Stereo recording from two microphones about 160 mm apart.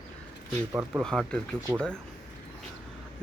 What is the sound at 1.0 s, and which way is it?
Speech, 5° left (ahead or behind).